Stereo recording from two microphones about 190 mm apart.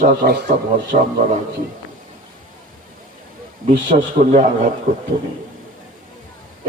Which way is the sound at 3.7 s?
30° right (ahead or behind).